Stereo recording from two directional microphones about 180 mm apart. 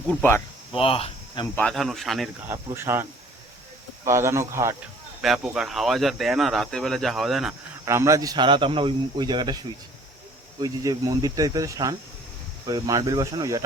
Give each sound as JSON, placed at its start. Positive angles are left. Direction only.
{"t": 0.1, "sound": "speech", "side_deg": 10}
{"t": 0.8, "sound": "speech", "side_deg": 30}
{"t": 1.5, "sound": "speech", "side_deg": 5}
{"t": 2.5, "sound": "speech", "side_deg": -15}
{"t": 5.2, "sound": "speech", "side_deg": -5}
{"t": 7.9, "sound": "a man's voice", "side_deg": -15}
{"t": 10.6, "sound": "a man's voice", "side_deg": -20}